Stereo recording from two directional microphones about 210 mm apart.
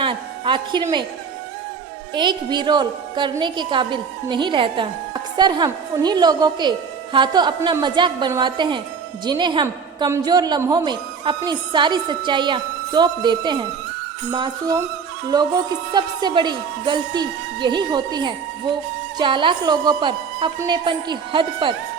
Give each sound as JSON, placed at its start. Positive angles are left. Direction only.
{"t": 0.0, "sound": "music", "side_deg": -25}
{"t": 2.1, "sound": "a woman's voice", "side_deg": -20}